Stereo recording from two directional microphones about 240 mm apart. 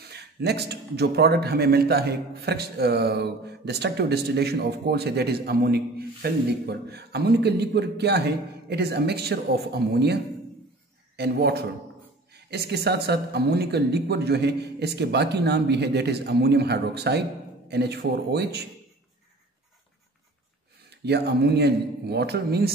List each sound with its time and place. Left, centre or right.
0.1 s a man's voice: right
20.9 s a man's voice: right